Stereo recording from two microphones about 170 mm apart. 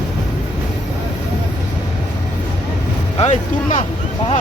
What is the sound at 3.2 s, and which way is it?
Speech, 40° left (ahead or behind).